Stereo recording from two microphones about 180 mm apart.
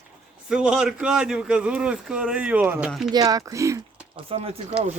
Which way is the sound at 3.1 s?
20° right (ahead or behind).